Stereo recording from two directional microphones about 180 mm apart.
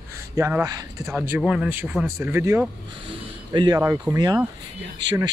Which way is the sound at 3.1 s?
25° right (ahead or behind).